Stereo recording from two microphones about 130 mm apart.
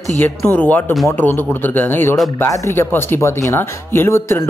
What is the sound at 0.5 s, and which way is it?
Speech, 15° left (ahead or behind).